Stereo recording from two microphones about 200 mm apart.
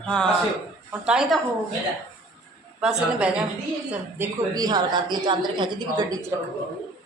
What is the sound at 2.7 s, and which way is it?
A woman's voice, 5° right (ahead or behind).